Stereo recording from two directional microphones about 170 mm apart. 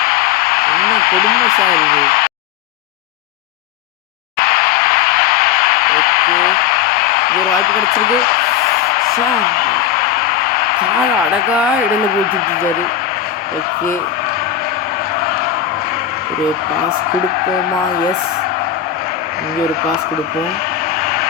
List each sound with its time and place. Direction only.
0.0 s radio: 60° left (ahead or behind)
4.4 s vehicle: 60° left (ahead or behind)